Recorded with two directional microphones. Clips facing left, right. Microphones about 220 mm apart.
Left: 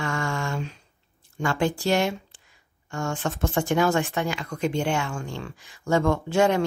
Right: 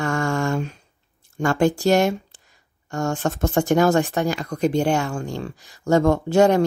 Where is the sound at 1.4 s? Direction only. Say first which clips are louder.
Right 6 dB; 45° right (ahead or behind).